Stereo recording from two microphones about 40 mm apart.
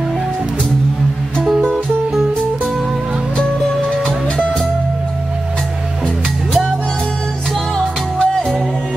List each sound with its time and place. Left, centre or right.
1.6 s music: centre
8.2 s music: centre